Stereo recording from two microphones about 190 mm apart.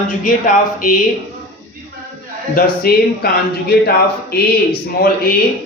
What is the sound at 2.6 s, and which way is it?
A man's voice, 55° left (ahead or behind).